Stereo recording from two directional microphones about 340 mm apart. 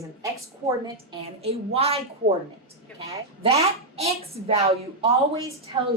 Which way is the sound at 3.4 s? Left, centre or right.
Centre.